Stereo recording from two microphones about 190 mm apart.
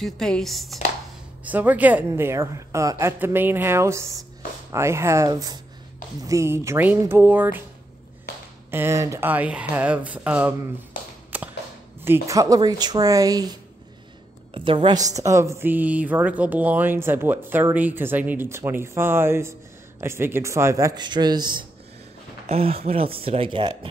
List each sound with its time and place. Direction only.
0.0 s a woman's voice: centre (ahead or behind)
8.6 s a woman's voice: 15° right (ahead or behind)
11.3 s a sound: 10° right (ahead or behind)
12.0 s a woman's voice: 15° right (ahead or behind)